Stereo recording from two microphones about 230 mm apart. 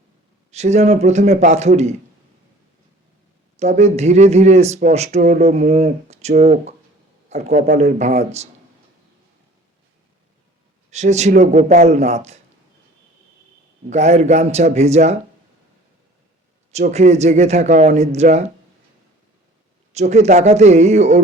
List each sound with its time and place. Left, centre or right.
0.5 s speech: right
3.6 s a man's voice: right
10.9 s speech: right
13.9 s speech: right
16.7 s speech: right
19.9 s speech: right